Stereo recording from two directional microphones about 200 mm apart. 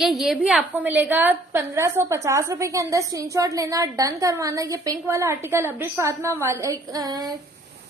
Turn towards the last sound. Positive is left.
turn(degrees=-20)  # may be behind; listen again after turning